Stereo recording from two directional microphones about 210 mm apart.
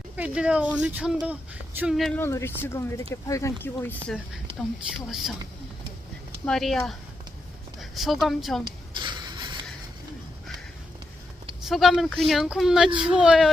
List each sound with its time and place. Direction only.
0.2 s speech: 5° right (ahead or behind)
6.4 s speech: centre (ahead or behind)
9.0 s a sound: 20° right (ahead or behind)
11.7 s speech: centre (ahead or behind)